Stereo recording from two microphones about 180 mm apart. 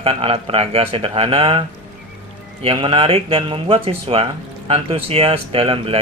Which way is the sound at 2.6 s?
30° right (ahead or behind).